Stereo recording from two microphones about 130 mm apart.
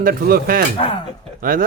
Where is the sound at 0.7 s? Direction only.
45° left (ahead or behind).